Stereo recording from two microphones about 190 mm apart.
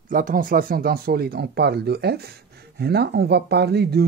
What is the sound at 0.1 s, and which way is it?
Speech, 45° right (ahead or behind).